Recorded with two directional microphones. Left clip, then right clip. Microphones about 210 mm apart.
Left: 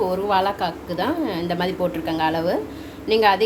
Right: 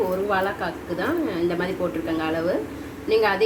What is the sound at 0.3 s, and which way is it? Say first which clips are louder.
A woman's voice: left 4 dB; 60° left (ahead or behind).